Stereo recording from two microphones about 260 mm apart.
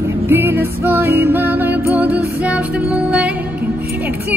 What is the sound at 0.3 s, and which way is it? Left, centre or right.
Music, centre.